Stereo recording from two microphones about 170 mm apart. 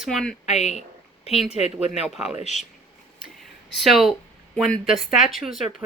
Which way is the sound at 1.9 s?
Centre (ahead or behind).